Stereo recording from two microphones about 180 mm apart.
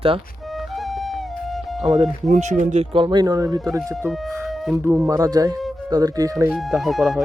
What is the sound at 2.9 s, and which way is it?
Speech, 25° right (ahead or behind).